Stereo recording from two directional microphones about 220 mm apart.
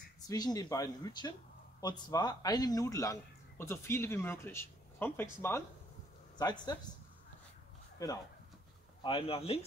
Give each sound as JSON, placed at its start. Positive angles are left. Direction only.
{"t": 0.3, "sound": "a man's voice", "side_deg": 15}
{"t": 8.0, "sound": "a man's voice", "side_deg": 15}
{"t": 9.0, "sound": "speech", "side_deg": 25}